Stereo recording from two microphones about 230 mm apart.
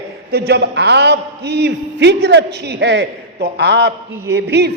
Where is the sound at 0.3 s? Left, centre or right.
Right.